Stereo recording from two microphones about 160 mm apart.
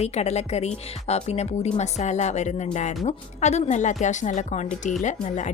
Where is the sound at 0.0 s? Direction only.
45° left (ahead or behind).